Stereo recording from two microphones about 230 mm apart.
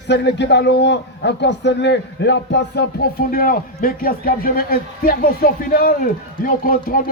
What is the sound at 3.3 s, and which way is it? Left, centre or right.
Speech, left.